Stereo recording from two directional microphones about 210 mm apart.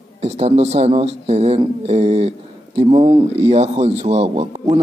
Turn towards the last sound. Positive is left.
turn(degrees=-25)  # may be behind; listen again after turning